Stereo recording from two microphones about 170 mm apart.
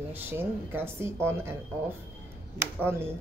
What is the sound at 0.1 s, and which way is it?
Speech, 10° right (ahead or behind).